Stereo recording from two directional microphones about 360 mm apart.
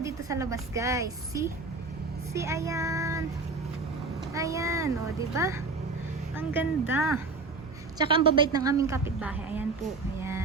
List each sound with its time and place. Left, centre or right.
0.0 s a woman's voice: centre
2.3 s child singing: centre
4.4 s a woman's voice: centre